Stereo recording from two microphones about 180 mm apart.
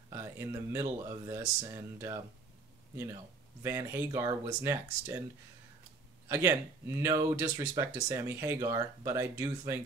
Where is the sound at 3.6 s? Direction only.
15° right (ahead or behind).